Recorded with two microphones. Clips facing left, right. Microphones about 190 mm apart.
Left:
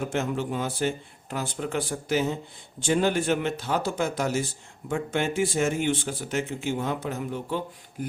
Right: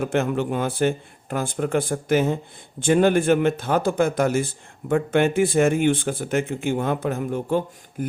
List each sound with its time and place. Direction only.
0.1 s a man's voice: 60° right (ahead or behind)